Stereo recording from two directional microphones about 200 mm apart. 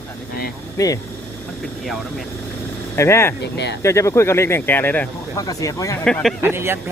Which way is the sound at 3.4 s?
60° left (ahead or behind).